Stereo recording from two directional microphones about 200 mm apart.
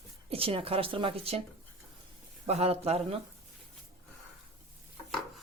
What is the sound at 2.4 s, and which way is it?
Speech, 30° right (ahead or behind).